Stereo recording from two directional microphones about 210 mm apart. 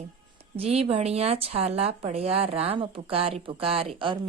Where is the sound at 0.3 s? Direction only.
30° right (ahead or behind).